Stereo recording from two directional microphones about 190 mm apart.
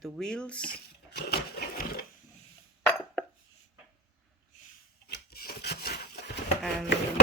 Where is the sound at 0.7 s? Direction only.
55° left (ahead or behind).